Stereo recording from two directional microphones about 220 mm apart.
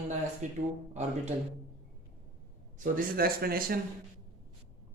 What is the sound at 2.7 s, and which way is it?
A man's voice, 35° right (ahead or behind).